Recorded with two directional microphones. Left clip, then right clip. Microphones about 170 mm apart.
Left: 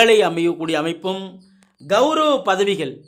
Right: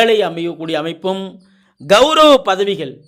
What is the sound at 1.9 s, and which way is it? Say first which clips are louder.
Speech: right 8 dB; 45° right (ahead or behind).